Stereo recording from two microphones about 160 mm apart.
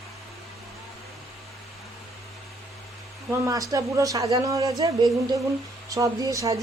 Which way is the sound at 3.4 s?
20° right (ahead or behind).